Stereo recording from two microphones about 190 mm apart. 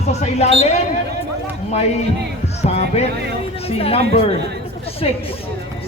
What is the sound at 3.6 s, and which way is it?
A man's voice, 30° left (ahead or behind).